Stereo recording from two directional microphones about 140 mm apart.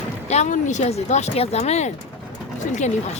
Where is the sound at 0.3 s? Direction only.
55° left (ahead or behind).